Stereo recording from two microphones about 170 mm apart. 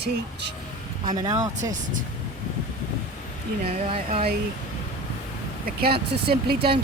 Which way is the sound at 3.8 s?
35° right (ahead or behind).